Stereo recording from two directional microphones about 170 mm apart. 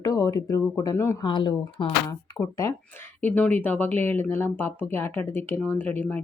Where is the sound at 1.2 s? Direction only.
25° left (ahead or behind).